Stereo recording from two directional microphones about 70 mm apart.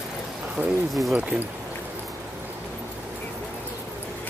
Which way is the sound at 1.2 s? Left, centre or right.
Centre.